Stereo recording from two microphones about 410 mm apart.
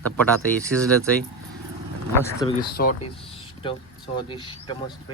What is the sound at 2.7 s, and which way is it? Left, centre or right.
Speech, left.